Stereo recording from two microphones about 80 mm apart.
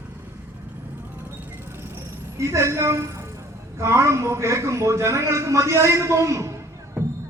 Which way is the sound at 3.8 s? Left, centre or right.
Right.